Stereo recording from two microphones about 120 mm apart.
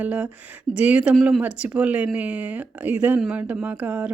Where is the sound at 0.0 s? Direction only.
10° right (ahead or behind).